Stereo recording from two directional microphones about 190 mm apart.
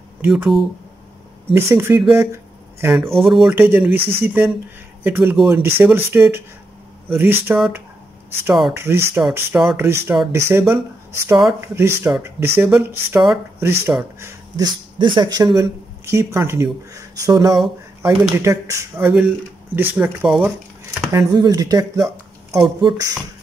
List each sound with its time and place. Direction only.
0.2 s speech: 5° right (ahead or behind)
1.5 s speech: 15° right (ahead or behind)
2.1 s a sound: 15° right (ahead or behind)
3.0 s speech: centre (ahead or behind)
8.7 s speech: 15° right (ahead or behind)
21.1 s speech: 20° right (ahead or behind)